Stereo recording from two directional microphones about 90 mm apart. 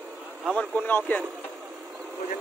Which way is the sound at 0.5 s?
15° left (ahead or behind).